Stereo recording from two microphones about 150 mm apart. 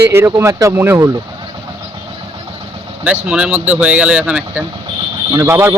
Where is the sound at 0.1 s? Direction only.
15° right (ahead or behind).